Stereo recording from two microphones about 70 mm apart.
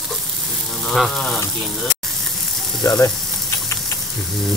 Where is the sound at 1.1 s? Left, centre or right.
Centre.